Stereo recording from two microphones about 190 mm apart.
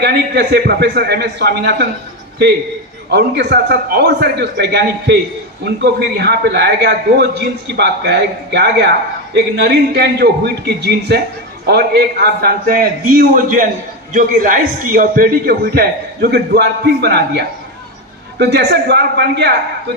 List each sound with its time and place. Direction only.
0.0 s a man's voice: 60° right (ahead or behind)
3.1 s a man's voice: 60° right (ahead or behind)